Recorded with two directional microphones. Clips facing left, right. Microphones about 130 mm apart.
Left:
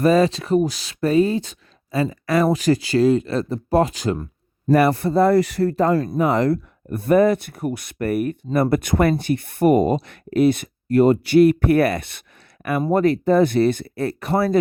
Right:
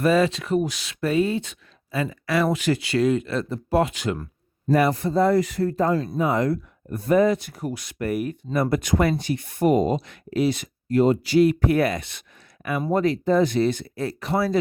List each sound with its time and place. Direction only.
0.0 s speech: 40° left (ahead or behind)
4.7 s speech: 60° left (ahead or behind)